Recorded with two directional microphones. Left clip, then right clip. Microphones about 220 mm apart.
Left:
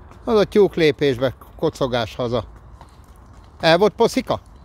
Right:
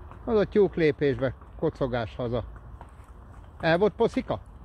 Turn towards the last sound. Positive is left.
turn(degrees=25)  # may be behind; listen again after turning